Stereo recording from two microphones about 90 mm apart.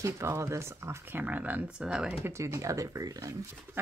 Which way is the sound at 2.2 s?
30° right (ahead or behind).